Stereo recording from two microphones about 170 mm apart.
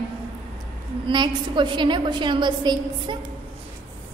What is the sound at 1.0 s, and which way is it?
A woman's voice, 25° right (ahead or behind).